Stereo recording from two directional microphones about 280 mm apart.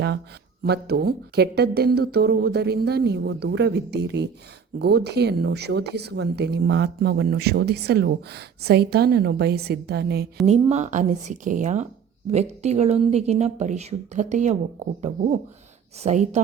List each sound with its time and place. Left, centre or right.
0.6 s speech: right